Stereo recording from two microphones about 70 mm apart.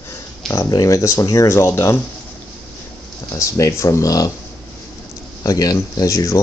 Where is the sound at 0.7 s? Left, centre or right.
Left.